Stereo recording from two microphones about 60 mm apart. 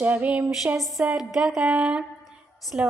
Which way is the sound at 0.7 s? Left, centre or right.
Centre.